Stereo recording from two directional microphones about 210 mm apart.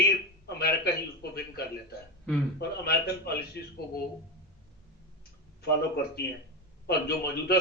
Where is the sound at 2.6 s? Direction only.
50° left (ahead or behind).